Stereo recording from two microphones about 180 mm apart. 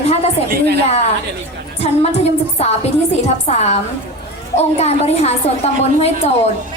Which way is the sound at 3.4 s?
35° left (ahead or behind).